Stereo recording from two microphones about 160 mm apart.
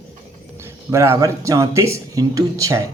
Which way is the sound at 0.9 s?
15° right (ahead or behind).